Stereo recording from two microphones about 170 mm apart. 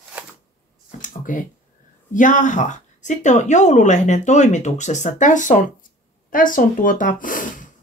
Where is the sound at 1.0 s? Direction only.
50° left (ahead or behind).